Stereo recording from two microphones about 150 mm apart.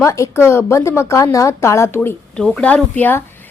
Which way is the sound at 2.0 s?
5° left (ahead or behind).